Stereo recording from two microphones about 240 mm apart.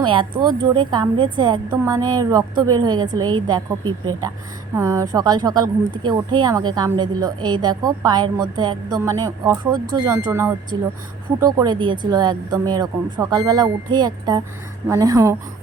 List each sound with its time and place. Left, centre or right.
0.0 s a woman's voice: centre